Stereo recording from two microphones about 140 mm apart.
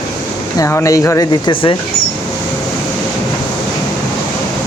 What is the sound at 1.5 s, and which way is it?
Speech, 35° left (ahead or behind).